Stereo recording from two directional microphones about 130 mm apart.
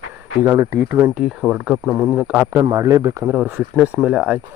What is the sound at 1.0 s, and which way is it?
Speech, 10° right (ahead or behind).